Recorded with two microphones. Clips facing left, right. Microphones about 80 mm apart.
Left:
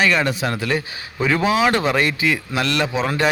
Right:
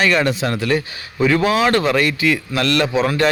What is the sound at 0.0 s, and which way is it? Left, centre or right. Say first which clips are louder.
Speech: right 2 dB; centre.